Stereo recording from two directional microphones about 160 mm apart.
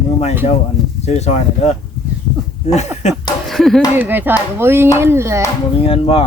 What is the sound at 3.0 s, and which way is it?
Speech, 45° left (ahead or behind).